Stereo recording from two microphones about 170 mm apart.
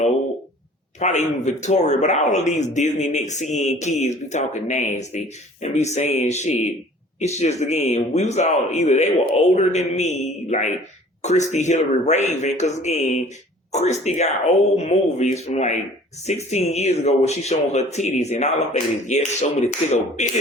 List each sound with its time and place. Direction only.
0.9 s a man's voice: 45° left (ahead or behind)